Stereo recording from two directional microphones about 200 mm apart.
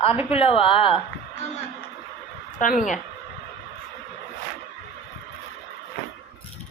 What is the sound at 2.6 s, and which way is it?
Speech, 40° left (ahead or behind).